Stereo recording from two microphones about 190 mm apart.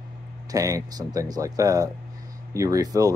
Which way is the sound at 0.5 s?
20° right (ahead or behind).